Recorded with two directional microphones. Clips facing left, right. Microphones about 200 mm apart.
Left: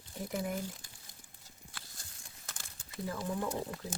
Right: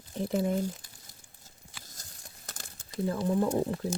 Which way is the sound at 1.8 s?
40° right (ahead or behind).